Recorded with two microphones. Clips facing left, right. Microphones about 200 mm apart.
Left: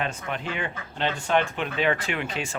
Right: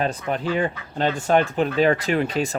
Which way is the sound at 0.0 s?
35° right (ahead or behind).